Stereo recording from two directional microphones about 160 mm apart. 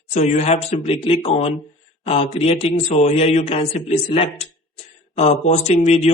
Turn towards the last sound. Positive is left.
turn(degrees=45)  # may be behind; listen again after turning